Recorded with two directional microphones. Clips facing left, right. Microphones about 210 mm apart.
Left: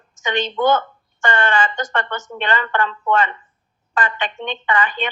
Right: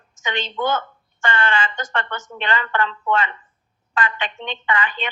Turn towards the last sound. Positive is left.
turn(degrees=45)  # may be behind; listen again after turning